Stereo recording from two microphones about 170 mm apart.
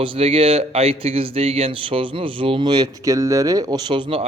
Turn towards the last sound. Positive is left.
turn(degrees=-30)  # may be behind; listen again after turning